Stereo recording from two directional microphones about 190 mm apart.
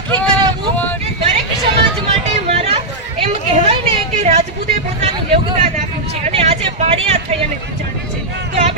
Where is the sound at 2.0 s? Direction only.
30° right (ahead or behind).